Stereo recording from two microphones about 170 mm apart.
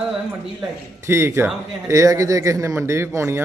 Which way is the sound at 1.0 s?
15° right (ahead or behind).